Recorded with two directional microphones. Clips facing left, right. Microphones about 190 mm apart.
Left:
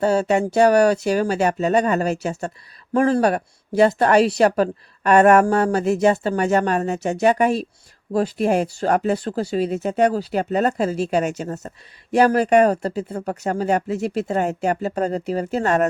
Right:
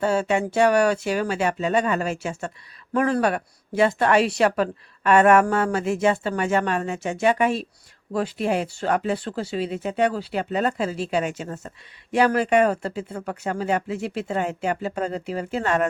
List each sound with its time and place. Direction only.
0.0 s speech: 40° left (ahead or behind)